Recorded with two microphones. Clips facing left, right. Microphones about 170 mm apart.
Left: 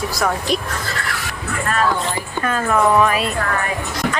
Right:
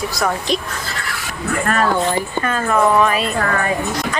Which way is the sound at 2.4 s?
Centre (ahead or behind).